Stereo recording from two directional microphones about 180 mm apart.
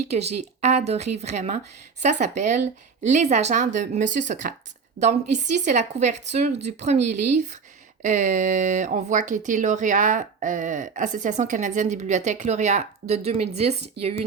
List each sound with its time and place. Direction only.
0.1 s speech: 35° right (ahead or behind)